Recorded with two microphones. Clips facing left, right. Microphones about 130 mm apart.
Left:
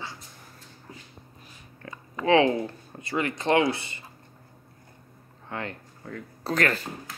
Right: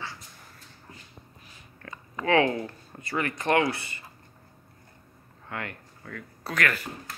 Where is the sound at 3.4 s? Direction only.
20° left (ahead or behind).